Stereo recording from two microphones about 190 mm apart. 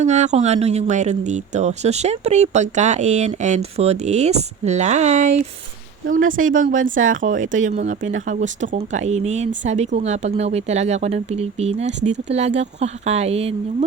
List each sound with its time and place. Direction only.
0.0 s speech: 35° right (ahead or behind)